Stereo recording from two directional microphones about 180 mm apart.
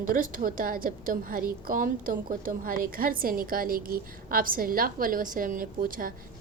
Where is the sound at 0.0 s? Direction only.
50° right (ahead or behind).